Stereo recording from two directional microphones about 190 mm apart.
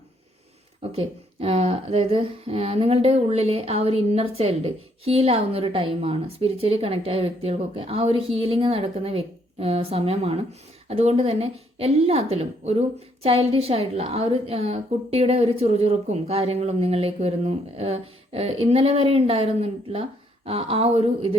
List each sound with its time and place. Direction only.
0.8 s speech: 30° right (ahead or behind)